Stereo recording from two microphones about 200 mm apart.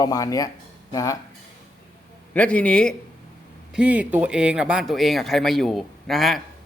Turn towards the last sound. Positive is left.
turn(degrees=0)  # may be behind; listen again after turning